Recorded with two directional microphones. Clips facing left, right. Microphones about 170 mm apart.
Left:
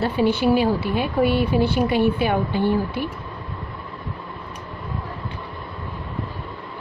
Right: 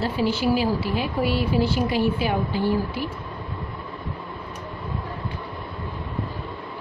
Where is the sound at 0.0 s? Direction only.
60° left (ahead or behind).